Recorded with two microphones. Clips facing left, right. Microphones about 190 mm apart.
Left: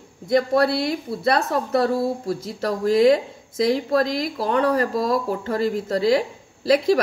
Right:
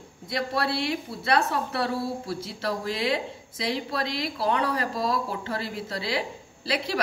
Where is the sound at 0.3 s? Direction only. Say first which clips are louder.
Left 9 dB; 45° left (ahead or behind).